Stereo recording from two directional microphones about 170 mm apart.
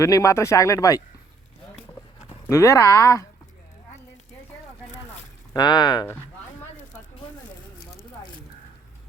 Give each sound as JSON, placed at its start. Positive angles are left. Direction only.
{"t": 0.0, "sound": "speech", "side_deg": 20}
{"t": 2.5, "sound": "speech", "side_deg": 15}
{"t": 5.5, "sound": "speech", "side_deg": 25}